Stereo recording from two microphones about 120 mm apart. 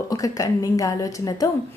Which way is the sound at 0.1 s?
30° left (ahead or behind).